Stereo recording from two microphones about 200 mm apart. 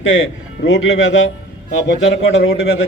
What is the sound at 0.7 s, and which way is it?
A man's voice, 70° left (ahead or behind).